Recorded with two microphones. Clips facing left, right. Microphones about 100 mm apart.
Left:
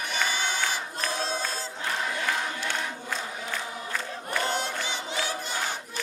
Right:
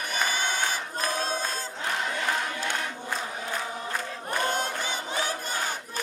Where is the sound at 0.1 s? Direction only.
45° right (ahead or behind).